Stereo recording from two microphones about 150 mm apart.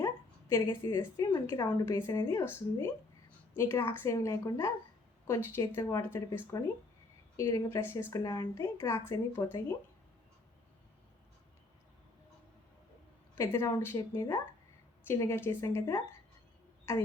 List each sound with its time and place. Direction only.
0.0 s a woman's voice: 20° left (ahead or behind)
13.3 s a woman's voice: 20° left (ahead or behind)